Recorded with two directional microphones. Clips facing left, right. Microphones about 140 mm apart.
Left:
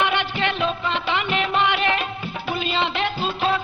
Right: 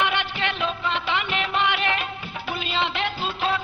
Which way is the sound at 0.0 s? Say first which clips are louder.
Left 3 dB; 35° left (ahead or behind).